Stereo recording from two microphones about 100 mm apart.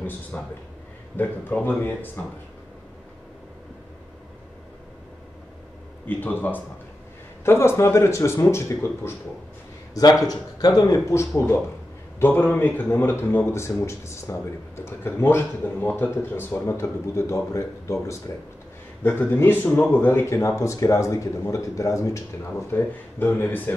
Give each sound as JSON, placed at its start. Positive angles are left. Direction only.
{"t": 0.3, "sound": "a man's voice", "side_deg": 15}
{"t": 6.0, "sound": "speech", "side_deg": 20}
{"t": 10.2, "sound": "speech", "side_deg": 40}
{"t": 19.0, "sound": "speech", "side_deg": 20}